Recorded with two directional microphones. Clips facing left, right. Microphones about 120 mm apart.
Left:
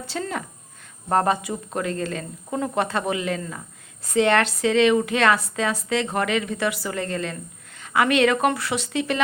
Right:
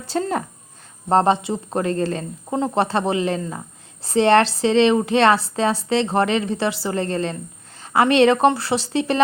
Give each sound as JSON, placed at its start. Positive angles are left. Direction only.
{"t": 0.1, "sound": "a woman's voice", "side_deg": -40}
{"t": 1.1, "sound": "a woman's voice", "side_deg": -25}